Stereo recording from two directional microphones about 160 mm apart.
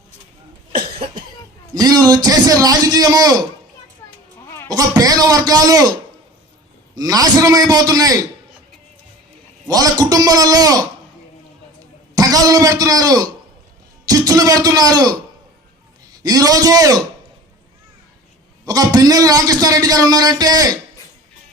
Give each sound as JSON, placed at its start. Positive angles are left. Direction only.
{"t": 0.9, "sound": "cough", "side_deg": -35}
{"t": 1.7, "sound": "a man's voice", "side_deg": -25}
{"t": 4.7, "sound": "a man's voice", "side_deg": -25}
{"t": 9.6, "sound": "a man's voice", "side_deg": -25}
{"t": 12.1, "sound": "a man's voice", "side_deg": -25}
{"t": 16.2, "sound": "a man's voice", "side_deg": -25}
{"t": 18.6, "sound": "a man's voice", "side_deg": -25}